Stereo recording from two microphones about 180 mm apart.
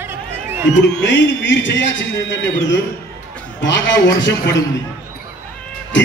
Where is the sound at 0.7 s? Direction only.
90° left.